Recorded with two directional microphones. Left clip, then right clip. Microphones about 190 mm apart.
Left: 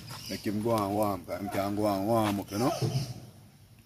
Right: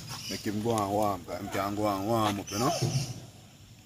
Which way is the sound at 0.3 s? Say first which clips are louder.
Left 1 dB; 30° left (ahead or behind).